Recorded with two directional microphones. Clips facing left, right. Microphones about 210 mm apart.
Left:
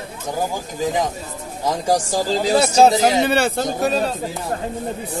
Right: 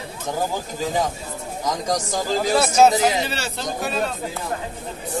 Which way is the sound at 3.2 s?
55° left (ahead or behind).